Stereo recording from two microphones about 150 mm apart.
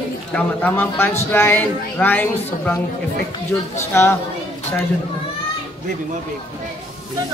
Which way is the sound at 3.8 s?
15° left (ahead or behind).